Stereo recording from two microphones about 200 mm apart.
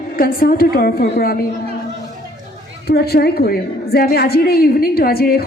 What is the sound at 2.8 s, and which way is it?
A woman's voice, 50° left (ahead or behind).